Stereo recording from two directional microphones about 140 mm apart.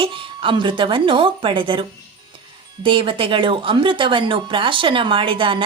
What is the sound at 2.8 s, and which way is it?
Speech, 35° right (ahead or behind).